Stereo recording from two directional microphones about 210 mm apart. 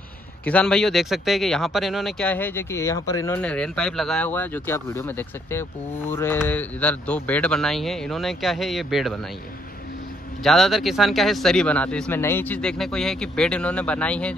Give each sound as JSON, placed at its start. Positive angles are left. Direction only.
{"t": 0.5, "sound": "speech", "side_deg": 5}
{"t": 10.4, "sound": "speech", "side_deg": 0}